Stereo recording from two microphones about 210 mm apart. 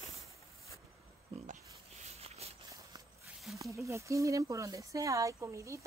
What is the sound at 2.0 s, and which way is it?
Walk, 30° right (ahead or behind).